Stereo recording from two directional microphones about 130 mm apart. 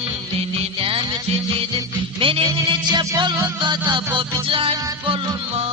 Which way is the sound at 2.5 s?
30° right (ahead or behind).